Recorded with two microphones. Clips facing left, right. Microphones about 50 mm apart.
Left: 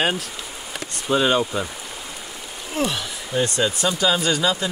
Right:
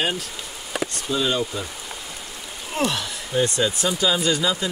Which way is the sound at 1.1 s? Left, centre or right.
Left.